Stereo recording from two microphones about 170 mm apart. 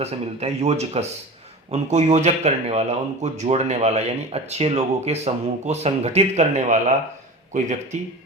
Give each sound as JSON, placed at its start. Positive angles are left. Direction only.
{"t": 0.0, "sound": "speech", "side_deg": -40}